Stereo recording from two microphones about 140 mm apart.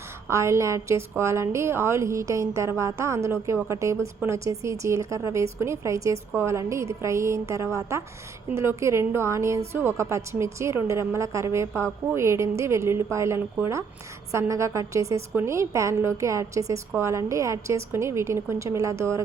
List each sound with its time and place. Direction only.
0.3 s a woman's voice: 20° right (ahead or behind)